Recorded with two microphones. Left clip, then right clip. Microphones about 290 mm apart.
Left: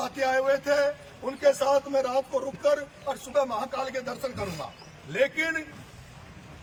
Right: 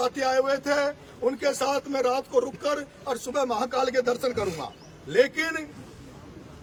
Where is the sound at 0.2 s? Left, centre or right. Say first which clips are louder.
Left 4 dB; centre.